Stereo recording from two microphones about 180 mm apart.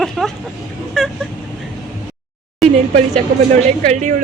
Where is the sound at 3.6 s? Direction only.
40° right (ahead or behind).